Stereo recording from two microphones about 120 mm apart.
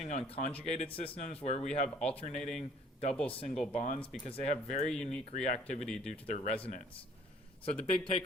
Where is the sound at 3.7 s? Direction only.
65° left (ahead or behind).